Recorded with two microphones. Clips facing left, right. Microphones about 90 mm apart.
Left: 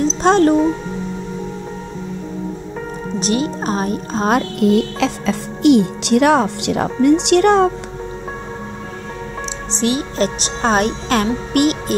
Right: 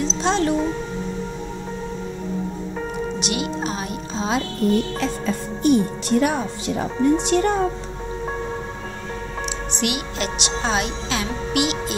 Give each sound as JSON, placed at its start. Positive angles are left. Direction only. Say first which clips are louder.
{"t": 0.0, "sound": "speech", "louder": "left 8 dB", "side_deg": 45}
{"t": 3.2, "sound": "speech", "louder": "left 5 dB", "side_deg": 35}
{"t": 4.6, "sound": "speech", "louder": "left 5 dB", "side_deg": 90}
{"t": 9.7, "sound": "speech", "louder": "left 9 dB", "side_deg": 30}